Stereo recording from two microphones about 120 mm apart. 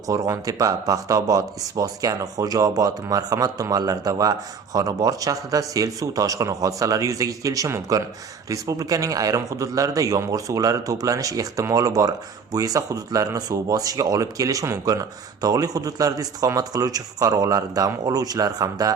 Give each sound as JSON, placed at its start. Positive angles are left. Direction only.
{"t": 0.1, "sound": "speech", "side_deg": -30}